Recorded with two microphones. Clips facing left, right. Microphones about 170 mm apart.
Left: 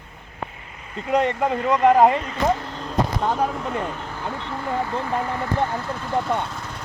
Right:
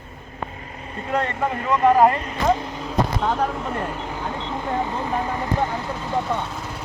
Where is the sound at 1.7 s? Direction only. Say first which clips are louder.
Even; 15° left (ahead or behind).